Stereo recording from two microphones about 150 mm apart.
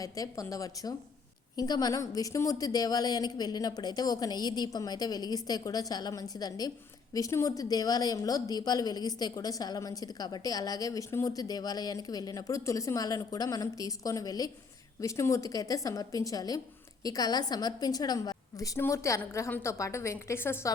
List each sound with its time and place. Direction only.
0.0 s speech: 20° left (ahead or behind)